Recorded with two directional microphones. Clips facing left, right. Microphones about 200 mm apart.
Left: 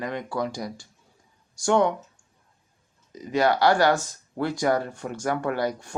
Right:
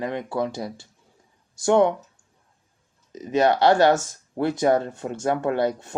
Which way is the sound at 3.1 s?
25° right (ahead or behind).